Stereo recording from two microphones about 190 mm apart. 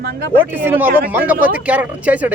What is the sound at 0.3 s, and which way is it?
Speech, 10° right (ahead or behind).